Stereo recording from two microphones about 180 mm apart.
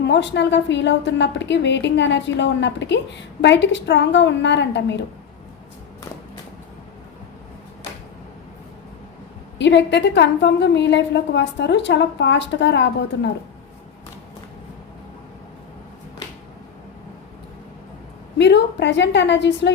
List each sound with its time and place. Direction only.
0.1 s a woman's voice: 75° left (ahead or behind)
9.6 s a woman's voice: 75° left (ahead or behind)
18.3 s a woman's voice: 75° left (ahead or behind)